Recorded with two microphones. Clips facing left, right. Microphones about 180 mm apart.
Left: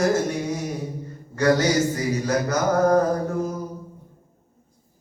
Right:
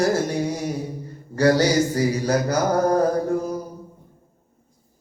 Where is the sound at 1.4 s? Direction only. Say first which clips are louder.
Right 2 dB; 35° right (ahead or behind).